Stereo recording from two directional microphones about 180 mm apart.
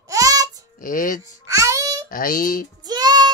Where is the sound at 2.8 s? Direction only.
20° right (ahead or behind).